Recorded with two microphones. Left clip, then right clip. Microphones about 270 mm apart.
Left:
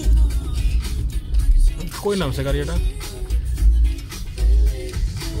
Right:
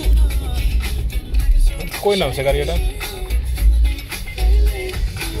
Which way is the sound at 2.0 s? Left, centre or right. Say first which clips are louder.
Right 6 dB; left.